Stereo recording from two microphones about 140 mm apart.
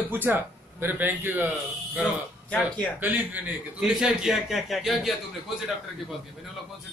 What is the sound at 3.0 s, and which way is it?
A man's voice, 10° right (ahead or behind).